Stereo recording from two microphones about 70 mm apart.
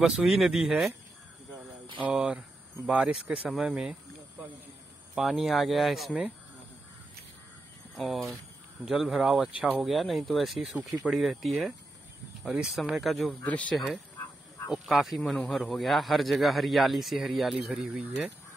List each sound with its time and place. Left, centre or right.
0.0 s speech: centre
1.6 s speech: right
5.1 s speech: centre
8.0 s speech: centre
9.5 s speech: centre
9.8 s speech: centre
13.3 s speech: left
14.7 s speech: centre
17.6 s speech: centre